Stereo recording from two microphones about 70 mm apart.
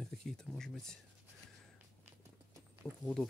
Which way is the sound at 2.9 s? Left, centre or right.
Left.